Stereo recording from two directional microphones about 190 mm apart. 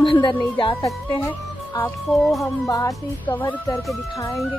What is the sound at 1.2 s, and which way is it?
Music, 15° left (ahead or behind).